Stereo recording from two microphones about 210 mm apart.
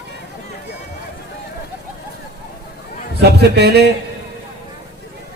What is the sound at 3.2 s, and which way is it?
Speech, 50° right (ahead or behind).